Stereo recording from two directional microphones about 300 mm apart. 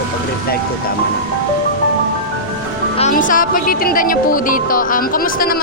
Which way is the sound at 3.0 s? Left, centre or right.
Left.